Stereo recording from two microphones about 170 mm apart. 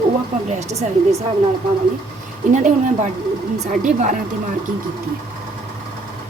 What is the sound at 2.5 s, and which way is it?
A woman's voice, 45° right (ahead or behind).